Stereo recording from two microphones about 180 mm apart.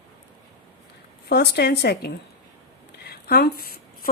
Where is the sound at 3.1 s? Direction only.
60° left (ahead or behind).